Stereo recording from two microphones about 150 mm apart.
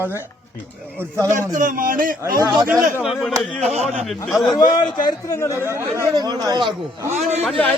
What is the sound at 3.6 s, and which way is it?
Speech, 45° right (ahead or behind).